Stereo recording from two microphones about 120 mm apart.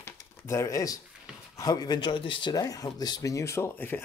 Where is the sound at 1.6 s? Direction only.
30° left (ahead or behind).